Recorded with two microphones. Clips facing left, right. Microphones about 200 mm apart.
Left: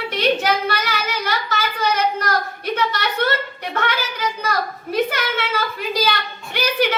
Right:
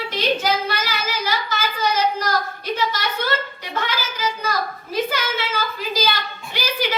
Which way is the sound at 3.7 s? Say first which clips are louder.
Left 3 dB; 65° left (ahead or behind).